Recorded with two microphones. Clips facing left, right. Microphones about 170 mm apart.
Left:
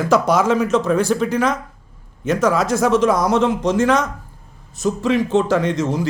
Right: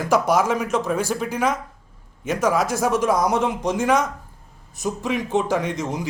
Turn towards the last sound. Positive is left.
turn(degrees=-15)  # may be behind; listen again after turning